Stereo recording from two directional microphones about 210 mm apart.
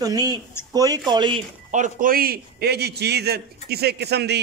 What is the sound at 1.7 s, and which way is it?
A man's voice, 40° right (ahead or behind).